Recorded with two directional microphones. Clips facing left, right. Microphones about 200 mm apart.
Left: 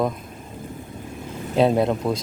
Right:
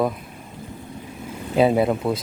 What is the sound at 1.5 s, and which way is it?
Speech, 5° right (ahead or behind).